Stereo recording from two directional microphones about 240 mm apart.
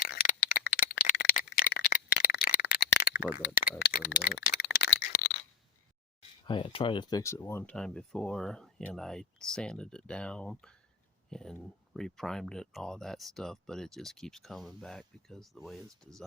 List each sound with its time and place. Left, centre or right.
0.0 s rattle: left
3.4 s speech: left
4.7 s rattle: left
6.5 s speech: left; by 16.2 s centre